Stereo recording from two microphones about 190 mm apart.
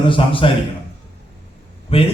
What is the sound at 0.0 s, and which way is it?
Speech, 25° left (ahead or behind).